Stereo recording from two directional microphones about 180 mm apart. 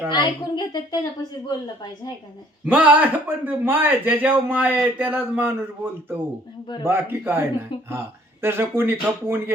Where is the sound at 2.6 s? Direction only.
10° right (ahead or behind).